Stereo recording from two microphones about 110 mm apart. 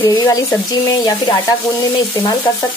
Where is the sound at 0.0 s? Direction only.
30° left (ahead or behind).